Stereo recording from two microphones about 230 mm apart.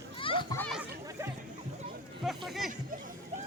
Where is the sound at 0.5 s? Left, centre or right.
Centre.